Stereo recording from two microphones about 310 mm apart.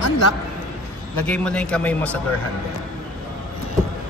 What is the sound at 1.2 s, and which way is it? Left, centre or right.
Speech, centre.